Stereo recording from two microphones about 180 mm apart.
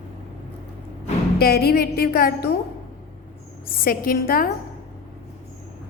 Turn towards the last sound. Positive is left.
turn(degrees=55)  # may be behind; listen again after turning